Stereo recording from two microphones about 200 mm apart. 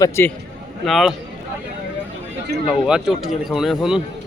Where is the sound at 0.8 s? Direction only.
Centre (ahead or behind).